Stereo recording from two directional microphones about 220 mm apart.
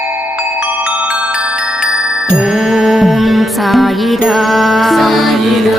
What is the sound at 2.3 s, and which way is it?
Music, centre (ahead or behind).